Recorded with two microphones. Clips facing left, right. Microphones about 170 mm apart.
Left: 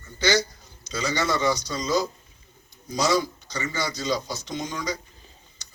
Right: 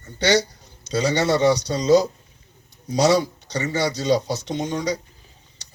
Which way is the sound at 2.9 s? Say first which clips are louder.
Right 5 dB; 65° right (ahead or behind).